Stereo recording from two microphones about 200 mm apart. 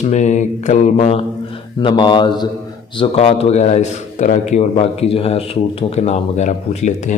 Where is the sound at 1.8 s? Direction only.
25° left (ahead or behind).